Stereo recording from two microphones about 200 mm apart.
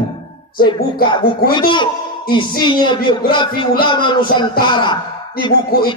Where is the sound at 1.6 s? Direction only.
25° left (ahead or behind).